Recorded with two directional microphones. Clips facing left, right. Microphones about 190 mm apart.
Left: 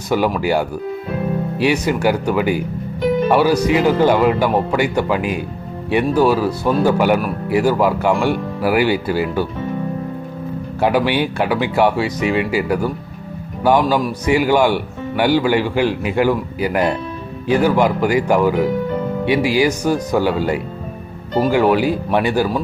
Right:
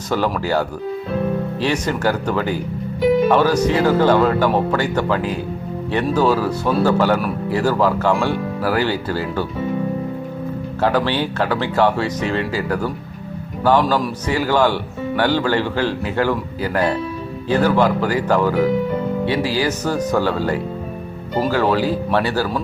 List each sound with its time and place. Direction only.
0.3 s speech: 10° left (ahead or behind)
10.8 s speech: 15° left (ahead or behind)